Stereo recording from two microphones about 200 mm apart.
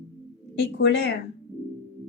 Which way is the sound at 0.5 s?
60° left (ahead or behind).